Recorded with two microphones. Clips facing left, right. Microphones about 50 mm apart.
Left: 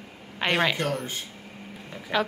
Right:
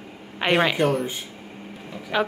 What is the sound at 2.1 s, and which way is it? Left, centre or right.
Speech, centre.